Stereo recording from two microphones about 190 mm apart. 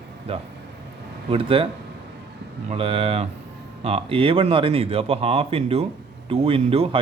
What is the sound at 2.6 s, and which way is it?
A man's voice, 30° right (ahead or behind).